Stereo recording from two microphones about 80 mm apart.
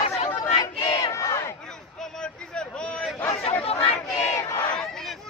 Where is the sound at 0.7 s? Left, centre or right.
Left.